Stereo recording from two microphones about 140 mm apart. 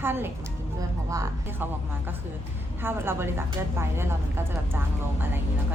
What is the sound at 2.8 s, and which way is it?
A woman's voice, 15° right (ahead or behind).